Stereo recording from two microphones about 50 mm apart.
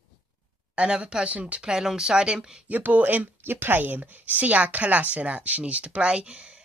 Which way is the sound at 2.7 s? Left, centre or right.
Right.